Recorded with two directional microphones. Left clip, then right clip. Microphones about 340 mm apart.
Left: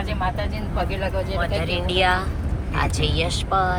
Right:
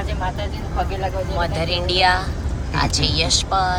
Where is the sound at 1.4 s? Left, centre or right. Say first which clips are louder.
Right 5 dB; centre.